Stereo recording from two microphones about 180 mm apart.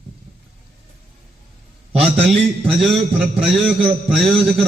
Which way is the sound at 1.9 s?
30° right (ahead or behind).